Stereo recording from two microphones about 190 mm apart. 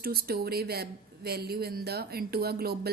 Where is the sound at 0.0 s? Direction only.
55° right (ahead or behind).